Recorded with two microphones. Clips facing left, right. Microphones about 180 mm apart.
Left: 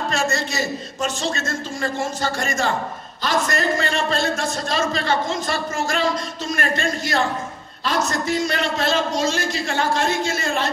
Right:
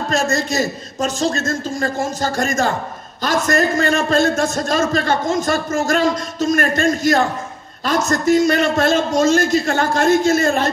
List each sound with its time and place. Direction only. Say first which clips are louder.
0.1 s a man's voice: right 8 dB; 40° right (ahead or behind)